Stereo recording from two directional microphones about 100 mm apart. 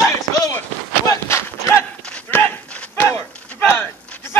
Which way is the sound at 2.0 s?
10° left (ahead or behind).